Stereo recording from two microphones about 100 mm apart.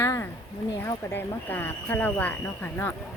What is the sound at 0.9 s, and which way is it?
Speech, 20° left (ahead or behind).